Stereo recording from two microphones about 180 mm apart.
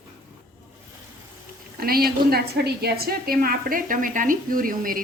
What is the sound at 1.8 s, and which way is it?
A woman's voice, 55° right (ahead or behind).